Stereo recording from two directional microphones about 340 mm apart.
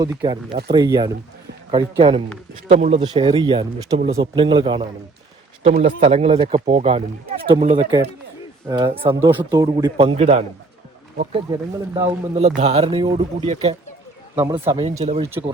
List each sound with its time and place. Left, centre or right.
0.0 s speech: centre
11.9 s speech: centre
14.3 s speech: centre
15.3 s speech: centre